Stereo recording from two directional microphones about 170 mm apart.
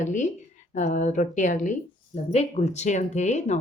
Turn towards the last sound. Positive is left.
turn(degrees=45)  # may be behind; listen again after turning